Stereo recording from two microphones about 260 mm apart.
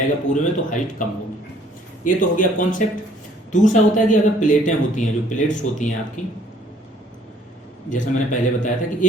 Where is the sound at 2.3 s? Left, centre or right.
Left.